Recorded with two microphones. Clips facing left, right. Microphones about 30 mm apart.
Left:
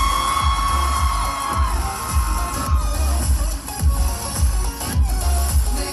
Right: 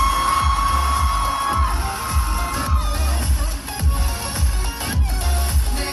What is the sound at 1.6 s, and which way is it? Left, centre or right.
Music, centre.